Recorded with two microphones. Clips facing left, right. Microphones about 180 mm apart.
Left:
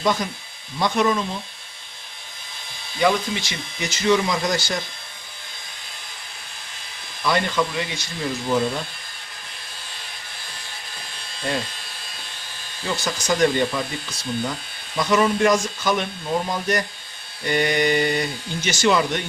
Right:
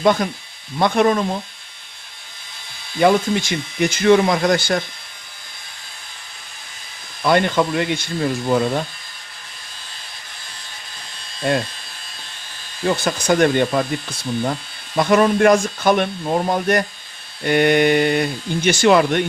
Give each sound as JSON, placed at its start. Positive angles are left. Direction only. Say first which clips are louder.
{"t": 0.0, "sound": "speech", "louder": "right 6 dB", "side_deg": -55}
{"t": 3.0, "sound": "speech", "louder": "right 5 dB", "side_deg": -50}
{"t": 7.3, "sound": "speech", "louder": "right 5 dB", "side_deg": -55}
{"t": 12.8, "sound": "speech", "louder": "right 7 dB", "side_deg": -55}